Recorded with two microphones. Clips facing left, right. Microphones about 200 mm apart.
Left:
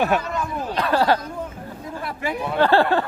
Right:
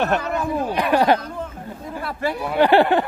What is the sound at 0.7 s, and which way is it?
Speech, 15° right (ahead or behind).